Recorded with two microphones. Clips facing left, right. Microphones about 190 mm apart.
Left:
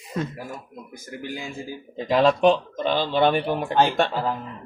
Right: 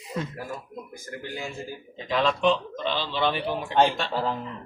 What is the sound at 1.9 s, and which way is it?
Speech, 40° left (ahead or behind).